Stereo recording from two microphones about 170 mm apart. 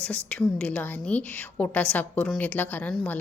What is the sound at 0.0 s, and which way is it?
A woman's voice, 5° left (ahead or behind).